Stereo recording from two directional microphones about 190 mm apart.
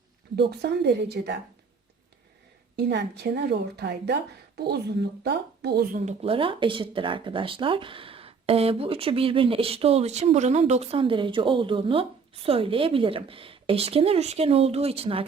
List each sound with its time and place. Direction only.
0.3 s a woman's voice: 60° right (ahead or behind)
2.7 s a woman's voice: 60° right (ahead or behind)
6.0 s speech: 35° right (ahead or behind)